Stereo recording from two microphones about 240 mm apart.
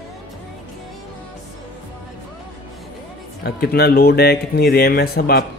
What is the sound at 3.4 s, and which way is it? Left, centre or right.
Speech, left.